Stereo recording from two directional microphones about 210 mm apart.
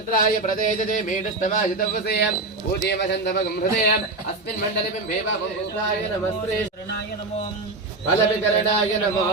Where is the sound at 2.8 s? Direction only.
50° left (ahead or behind).